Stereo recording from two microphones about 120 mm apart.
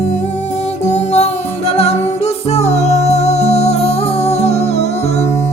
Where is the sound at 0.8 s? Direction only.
70° left (ahead or behind).